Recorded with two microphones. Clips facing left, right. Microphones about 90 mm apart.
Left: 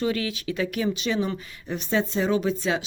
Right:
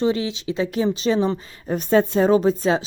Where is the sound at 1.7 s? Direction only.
45° right (ahead or behind).